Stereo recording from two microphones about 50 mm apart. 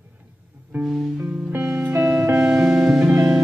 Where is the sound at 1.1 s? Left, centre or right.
Right.